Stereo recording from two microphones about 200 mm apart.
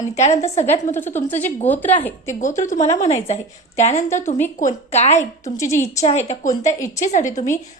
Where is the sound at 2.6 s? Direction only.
35° left (ahead or behind).